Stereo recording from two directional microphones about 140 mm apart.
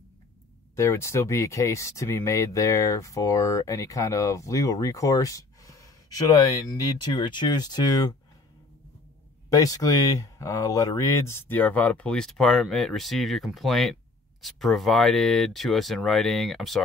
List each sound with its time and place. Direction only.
0.7 s speech: 20° left (ahead or behind)
9.5 s speech: 25° left (ahead or behind); by 16.8 s centre (ahead or behind)